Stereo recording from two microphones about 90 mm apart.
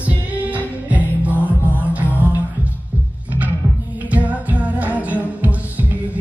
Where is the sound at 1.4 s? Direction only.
20° left (ahead or behind).